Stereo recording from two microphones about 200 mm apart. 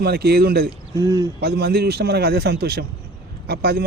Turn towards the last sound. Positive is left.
turn(degrees=-50)  # may be behind; listen again after turning